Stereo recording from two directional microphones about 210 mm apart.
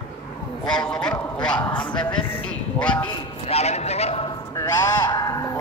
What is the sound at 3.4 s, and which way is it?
Horse, 30° left (ahead or behind).